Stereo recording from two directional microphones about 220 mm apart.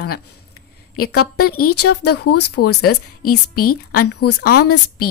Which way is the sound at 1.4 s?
40° left (ahead or behind).